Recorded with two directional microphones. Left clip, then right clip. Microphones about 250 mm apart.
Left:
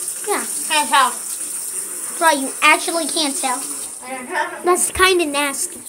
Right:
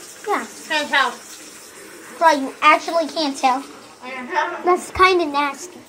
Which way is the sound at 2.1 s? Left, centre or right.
Centre.